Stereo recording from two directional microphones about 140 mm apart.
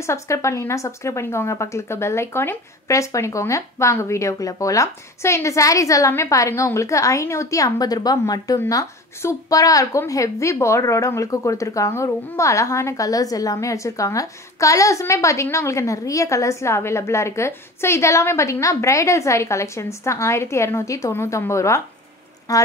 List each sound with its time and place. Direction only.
0.0 s speech: 20° left (ahead or behind)